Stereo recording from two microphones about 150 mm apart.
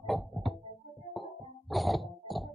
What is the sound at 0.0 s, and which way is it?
Music, centre (ahead or behind).